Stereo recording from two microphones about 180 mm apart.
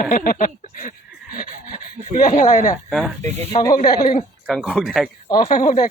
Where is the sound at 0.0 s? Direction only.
50° left (ahead or behind).